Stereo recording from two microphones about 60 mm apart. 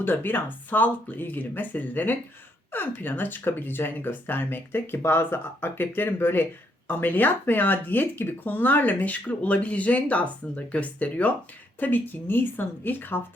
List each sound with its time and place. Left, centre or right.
0.0 s speech: left